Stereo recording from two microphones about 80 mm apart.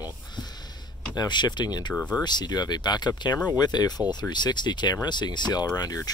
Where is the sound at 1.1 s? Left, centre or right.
Left.